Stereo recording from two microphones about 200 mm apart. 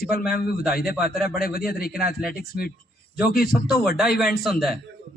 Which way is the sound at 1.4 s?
50° left (ahead or behind).